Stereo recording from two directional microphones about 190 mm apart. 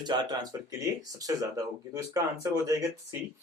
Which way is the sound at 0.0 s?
20° right (ahead or behind).